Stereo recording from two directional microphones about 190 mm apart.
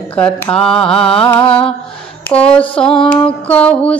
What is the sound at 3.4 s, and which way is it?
Music, 5° left (ahead or behind).